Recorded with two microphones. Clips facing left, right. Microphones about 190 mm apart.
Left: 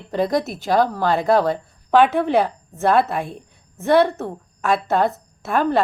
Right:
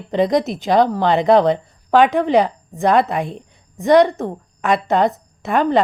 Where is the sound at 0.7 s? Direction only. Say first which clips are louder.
Right 3 dB; 20° right (ahead or behind).